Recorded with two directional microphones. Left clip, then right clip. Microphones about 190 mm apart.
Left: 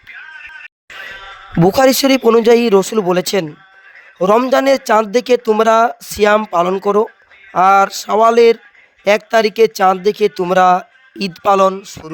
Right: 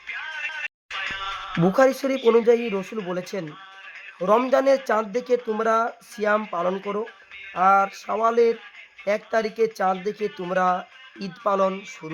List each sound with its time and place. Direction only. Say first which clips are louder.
0.1 s music: right 2 dB; 25° right (ahead or behind)
1.5 s speech: left 8 dB; 50° left (ahead or behind)
11.7 s speech: left 7 dB; 35° left (ahead or behind)